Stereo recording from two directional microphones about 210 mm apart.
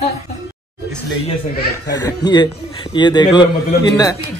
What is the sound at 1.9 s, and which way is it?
A man's voice, 20° left (ahead or behind).